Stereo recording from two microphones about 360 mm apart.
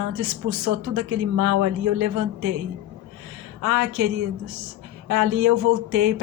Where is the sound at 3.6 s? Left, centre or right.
Right.